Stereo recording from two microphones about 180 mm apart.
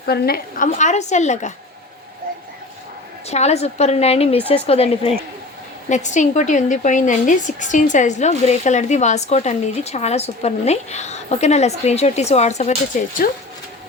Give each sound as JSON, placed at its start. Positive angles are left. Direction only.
{"t": 0.0, "sound": "a woman's voice", "side_deg": 60}
{"t": 3.2, "sound": "a woman's voice", "side_deg": 35}